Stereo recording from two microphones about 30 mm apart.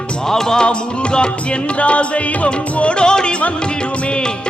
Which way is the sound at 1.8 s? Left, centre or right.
Left.